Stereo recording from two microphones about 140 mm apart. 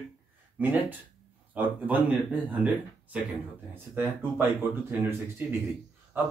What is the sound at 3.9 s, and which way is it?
Speech, 15° right (ahead or behind).